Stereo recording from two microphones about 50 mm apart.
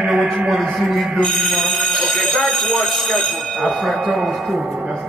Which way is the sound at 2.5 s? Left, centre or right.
Centre.